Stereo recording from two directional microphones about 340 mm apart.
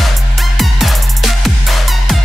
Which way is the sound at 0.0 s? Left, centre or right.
Centre.